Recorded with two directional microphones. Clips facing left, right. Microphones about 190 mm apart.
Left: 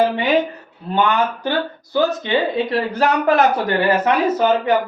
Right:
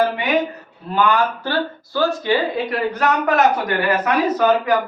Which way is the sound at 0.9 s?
20° left (ahead or behind).